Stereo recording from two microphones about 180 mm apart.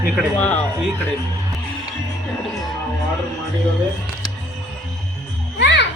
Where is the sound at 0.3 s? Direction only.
10° left (ahead or behind).